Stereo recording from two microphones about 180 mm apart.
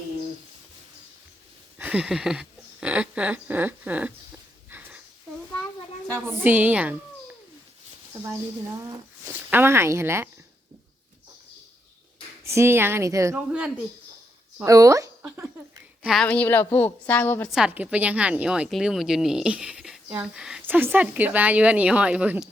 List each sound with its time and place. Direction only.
1.8 s a woman's voice: 5° right (ahead or behind)
4.7 s a sound: 15° right (ahead or behind)
6.1 s a woman's voice: 10° right (ahead or behind)
8.9 s a woman's voice: 15° right (ahead or behind)
12.4 s a woman's voice: 15° right (ahead or behind)
13.3 s a woman's voice: 5° right (ahead or behind)
14.6 s a woman's voice: 15° right (ahead or behind)
16.0 s a woman's voice: 5° left (ahead or behind)
17.5 s a woman's voice: 5° right (ahead or behind)